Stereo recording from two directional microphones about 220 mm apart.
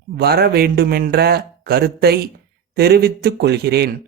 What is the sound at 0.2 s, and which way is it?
A man's voice, 45° right (ahead or behind).